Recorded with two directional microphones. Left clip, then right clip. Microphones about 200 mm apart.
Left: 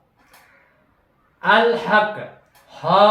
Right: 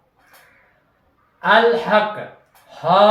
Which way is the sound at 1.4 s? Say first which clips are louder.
Right 2 dB; 15° left (ahead or behind).